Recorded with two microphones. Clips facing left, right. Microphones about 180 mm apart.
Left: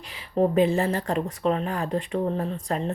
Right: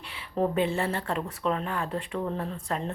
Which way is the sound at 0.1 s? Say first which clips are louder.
Left 5 dB; 35° left (ahead or behind).